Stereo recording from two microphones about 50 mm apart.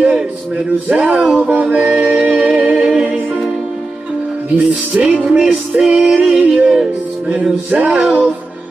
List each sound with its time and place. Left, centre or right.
0.8 s music: right
4.6 s music: right; by 6.9 s centre
7.7 s music: right